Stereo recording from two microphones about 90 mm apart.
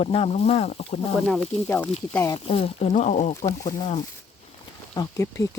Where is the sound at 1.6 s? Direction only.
20° left (ahead or behind).